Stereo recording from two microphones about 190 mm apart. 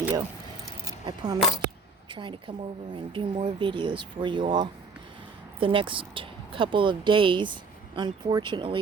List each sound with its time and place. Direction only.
0.9 s keys jangling: 20° right (ahead or behind)
2.0 s speech: 25° right (ahead or behind)